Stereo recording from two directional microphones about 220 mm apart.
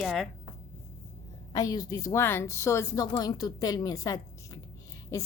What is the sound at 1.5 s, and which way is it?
A woman's voice, 15° left (ahead or behind).